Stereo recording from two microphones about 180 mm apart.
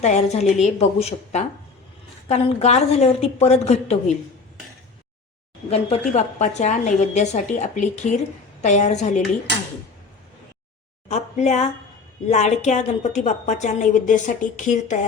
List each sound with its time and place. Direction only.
0.0 s a woman's voice: 40° left (ahead or behind)
5.7 s a woman's voice: 35° left (ahead or behind)
11.1 s a woman's voice: 40° left (ahead or behind)